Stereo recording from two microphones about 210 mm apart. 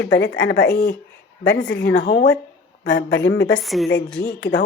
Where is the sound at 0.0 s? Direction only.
60° left (ahead or behind).